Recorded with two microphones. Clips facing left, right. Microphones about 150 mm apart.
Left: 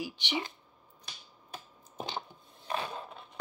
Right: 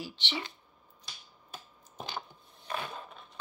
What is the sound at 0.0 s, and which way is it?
Speech, 15° left (ahead or behind).